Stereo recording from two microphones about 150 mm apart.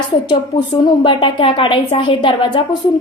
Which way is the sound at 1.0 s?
35° left (ahead or behind).